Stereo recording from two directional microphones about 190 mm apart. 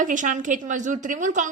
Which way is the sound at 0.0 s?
40° right (ahead or behind).